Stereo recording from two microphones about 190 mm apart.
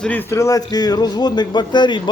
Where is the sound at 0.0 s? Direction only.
10° left (ahead or behind).